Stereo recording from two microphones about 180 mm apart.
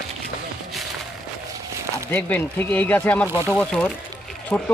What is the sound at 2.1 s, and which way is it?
Speech, 10° left (ahead or behind).